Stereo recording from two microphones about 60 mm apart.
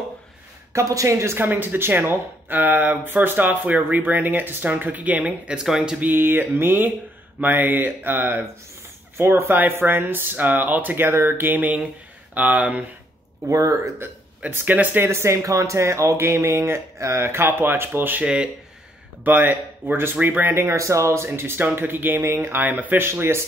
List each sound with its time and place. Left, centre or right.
0.7 s speech: right
1.4 s speech: right
5.6 s speech: centre
5.9 s speech: right
13.5 s speech: right
14.5 s speech: right
15.0 s speech: right
18.2 s speech: centre
19.2 s speech: right
21.3 s speech: right
22.6 s speech: right
22.9 s speech: right